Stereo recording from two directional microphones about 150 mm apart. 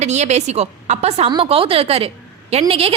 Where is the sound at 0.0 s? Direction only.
50° right (ahead or behind).